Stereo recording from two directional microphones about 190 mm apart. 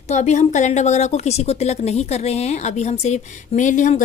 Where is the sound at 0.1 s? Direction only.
40° left (ahead or behind).